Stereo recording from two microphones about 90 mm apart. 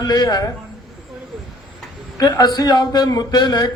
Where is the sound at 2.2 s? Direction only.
45° left (ahead or behind).